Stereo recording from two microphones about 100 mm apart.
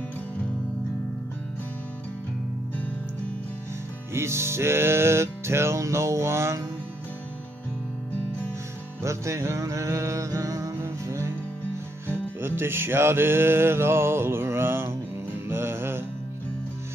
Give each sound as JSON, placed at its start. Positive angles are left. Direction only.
{"t": 4.1, "sound": "music", "side_deg": -25}
{"t": 9.0, "sound": "music", "side_deg": -30}